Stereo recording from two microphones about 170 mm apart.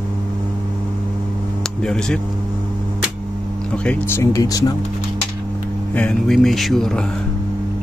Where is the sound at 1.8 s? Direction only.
5° left (ahead or behind).